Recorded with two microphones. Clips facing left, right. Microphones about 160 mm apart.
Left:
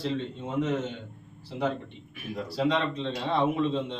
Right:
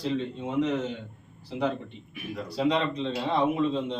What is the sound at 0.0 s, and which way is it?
Speech, 10° right (ahead or behind).